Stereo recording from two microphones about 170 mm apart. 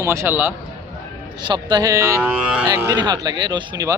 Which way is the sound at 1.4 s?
25° right (ahead or behind).